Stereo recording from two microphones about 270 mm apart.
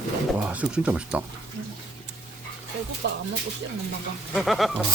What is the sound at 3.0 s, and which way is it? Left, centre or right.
Speech, right.